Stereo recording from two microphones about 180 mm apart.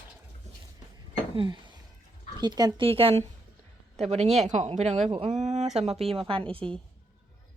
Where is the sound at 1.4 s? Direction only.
25° right (ahead or behind).